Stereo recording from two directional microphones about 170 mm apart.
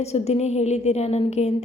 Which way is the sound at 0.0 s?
40° left (ahead or behind).